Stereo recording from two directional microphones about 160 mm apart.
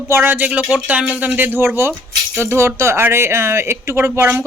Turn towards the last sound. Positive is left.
turn(degrees=-15)  # may be behind; listen again after turning